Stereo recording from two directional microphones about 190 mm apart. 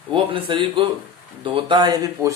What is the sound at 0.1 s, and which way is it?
Speech, 25° right (ahead or behind).